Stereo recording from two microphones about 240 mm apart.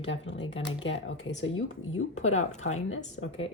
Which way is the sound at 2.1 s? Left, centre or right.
Left.